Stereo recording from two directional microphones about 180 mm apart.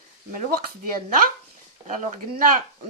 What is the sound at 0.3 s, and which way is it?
Speech, 50° right (ahead or behind).